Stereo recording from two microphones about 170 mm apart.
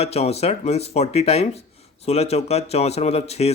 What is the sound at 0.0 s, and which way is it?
Speech, 35° left (ahead or behind).